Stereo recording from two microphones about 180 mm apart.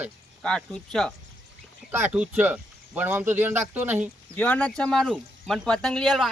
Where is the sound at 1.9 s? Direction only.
10° right (ahead or behind).